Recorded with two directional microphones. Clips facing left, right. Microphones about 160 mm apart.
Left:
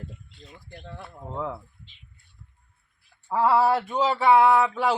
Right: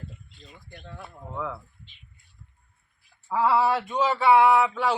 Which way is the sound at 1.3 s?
25° left (ahead or behind).